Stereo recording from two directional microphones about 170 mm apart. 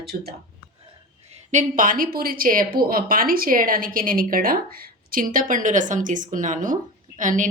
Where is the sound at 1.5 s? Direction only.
55° right (ahead or behind).